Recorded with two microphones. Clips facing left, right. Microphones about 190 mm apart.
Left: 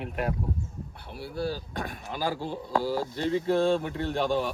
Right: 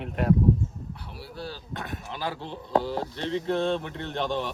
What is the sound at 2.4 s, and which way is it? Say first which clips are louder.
A man's voice: right 2 dB; 5° left (ahead or behind).